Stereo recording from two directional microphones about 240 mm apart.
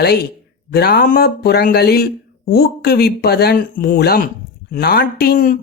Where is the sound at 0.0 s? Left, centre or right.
Left.